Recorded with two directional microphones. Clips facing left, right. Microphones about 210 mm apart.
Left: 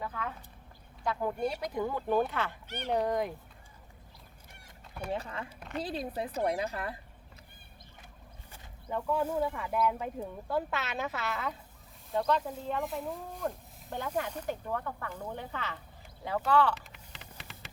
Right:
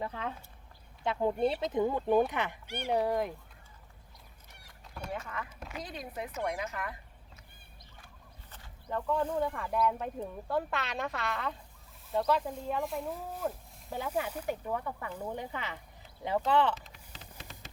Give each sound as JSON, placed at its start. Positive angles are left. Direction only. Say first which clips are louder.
{"t": 0.0, "sound": "speech", "louder": "right 1 dB", "side_deg": -25}
{"t": 5.1, "sound": "a woman's voice", "louder": "left 3 dB", "side_deg": 30}
{"t": 8.5, "sound": "speech", "louder": "even", "side_deg": 10}